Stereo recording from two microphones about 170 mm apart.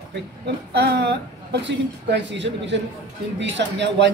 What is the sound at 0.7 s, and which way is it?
Speech, 80° right.